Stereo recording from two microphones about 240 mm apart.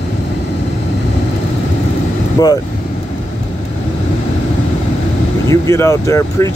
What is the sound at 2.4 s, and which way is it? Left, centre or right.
Speech, centre.